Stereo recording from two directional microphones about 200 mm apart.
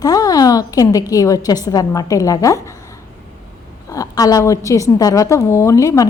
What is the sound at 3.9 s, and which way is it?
A woman's voice, 15° left (ahead or behind).